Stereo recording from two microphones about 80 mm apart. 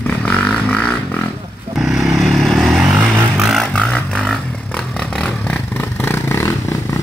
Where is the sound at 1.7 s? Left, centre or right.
Centre.